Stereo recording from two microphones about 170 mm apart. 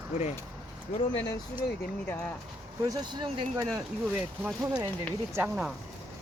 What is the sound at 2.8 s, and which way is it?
Speech, 25° right (ahead or behind).